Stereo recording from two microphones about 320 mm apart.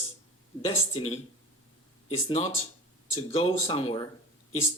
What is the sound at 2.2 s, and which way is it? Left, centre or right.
Speech, centre.